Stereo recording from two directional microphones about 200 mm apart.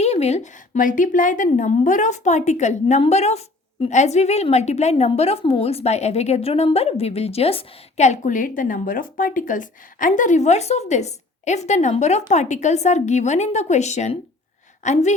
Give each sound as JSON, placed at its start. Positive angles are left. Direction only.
{"t": 0.0, "sound": "speech", "side_deg": 35}